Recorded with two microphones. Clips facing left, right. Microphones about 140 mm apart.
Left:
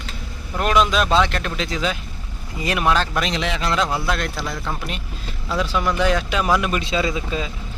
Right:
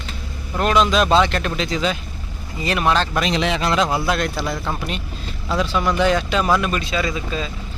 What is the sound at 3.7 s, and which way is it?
A man's voice, 5° right (ahead or behind).